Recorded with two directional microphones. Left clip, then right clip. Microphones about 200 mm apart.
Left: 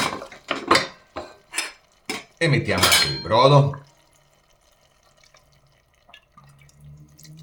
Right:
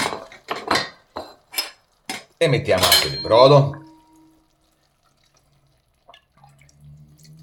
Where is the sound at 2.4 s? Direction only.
30° right (ahead or behind).